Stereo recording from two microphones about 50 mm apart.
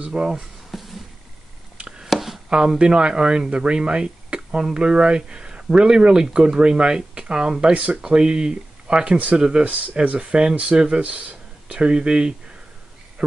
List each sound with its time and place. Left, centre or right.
0.0 s speech: centre
0.7 s a sound: centre
1.8 s chopping: centre
2.0 s chopping: centre
2.5 s speech: centre
8.0 s speech: centre
9.7 s speech: right
10.1 s speech: centre